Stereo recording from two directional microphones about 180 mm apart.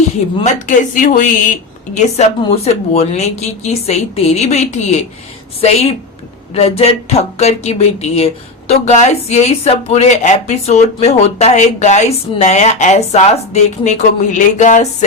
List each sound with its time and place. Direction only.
0.4 s speech: 45° left (ahead or behind)